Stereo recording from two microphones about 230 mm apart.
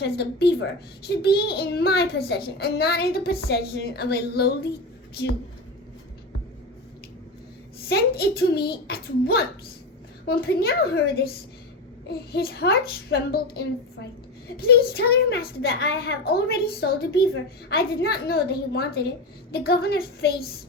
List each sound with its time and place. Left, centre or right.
0.0 s a child's voice: left
7.9 s a child's voice: left